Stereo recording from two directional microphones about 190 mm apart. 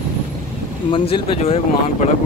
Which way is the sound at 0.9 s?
25° left (ahead or behind).